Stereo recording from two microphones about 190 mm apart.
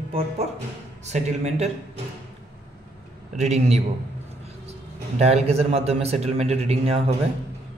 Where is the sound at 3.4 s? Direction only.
35° right (ahead or behind).